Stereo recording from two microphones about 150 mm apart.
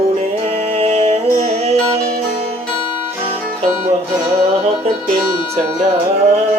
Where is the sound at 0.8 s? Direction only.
40° right (ahead or behind).